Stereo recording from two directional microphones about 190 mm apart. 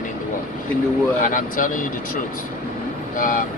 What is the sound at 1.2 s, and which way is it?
Speech, 45° left (ahead or behind).